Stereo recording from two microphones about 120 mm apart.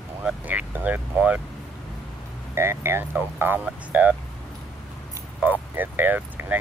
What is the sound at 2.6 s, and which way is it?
Speech, 20° right (ahead or behind).